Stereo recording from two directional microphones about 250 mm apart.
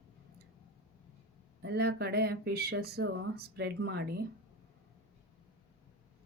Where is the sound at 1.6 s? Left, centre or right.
Right.